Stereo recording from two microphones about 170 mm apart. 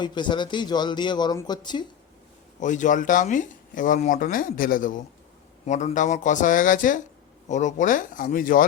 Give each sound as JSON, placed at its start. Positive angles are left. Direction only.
{"t": 0.0, "sound": "speech", "side_deg": 25}
{"t": 2.6, "sound": "speech", "side_deg": 45}